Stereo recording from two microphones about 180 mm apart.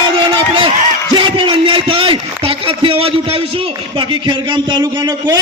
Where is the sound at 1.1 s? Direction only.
30° right (ahead or behind).